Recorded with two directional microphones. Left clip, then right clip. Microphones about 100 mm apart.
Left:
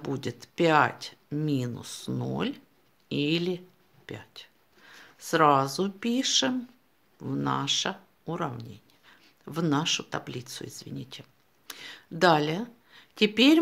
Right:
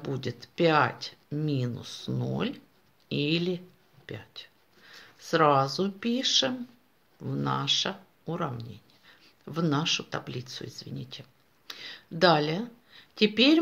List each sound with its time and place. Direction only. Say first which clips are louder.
0.0 s speech: left 1 dB; 45° left (ahead or behind)